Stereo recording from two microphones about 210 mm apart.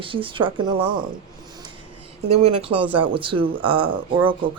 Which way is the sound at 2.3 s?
30° right (ahead or behind).